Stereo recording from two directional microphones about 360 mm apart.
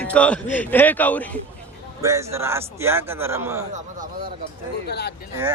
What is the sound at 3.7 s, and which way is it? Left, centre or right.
Speech, right.